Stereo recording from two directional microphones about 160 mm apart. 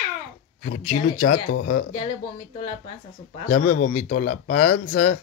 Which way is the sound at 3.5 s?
55° left (ahead or behind).